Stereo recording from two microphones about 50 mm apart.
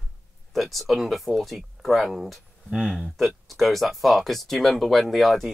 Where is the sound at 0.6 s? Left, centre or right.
Centre.